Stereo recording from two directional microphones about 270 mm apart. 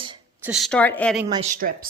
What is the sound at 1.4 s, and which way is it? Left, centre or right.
Speech, right.